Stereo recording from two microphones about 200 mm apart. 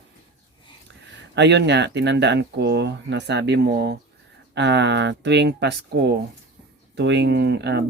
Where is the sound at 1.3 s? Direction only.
60° right (ahead or behind).